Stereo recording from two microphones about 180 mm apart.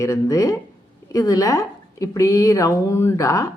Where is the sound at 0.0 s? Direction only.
20° left (ahead or behind).